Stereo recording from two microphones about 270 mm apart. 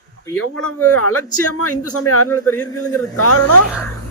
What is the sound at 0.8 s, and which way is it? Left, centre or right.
Speech, left.